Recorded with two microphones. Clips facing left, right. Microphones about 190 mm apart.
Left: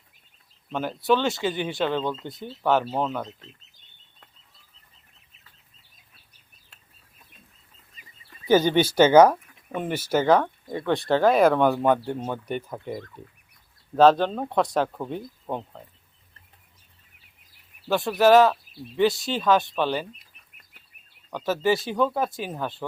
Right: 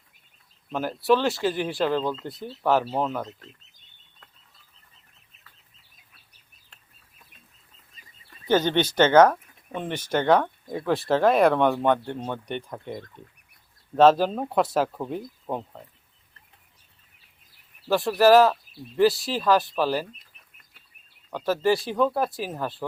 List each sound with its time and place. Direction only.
0.7 s speech: centre (ahead or behind)
8.4 s speech: 10° left (ahead or behind)
17.8 s speech: centre (ahead or behind)
21.2 s speech: centre (ahead or behind)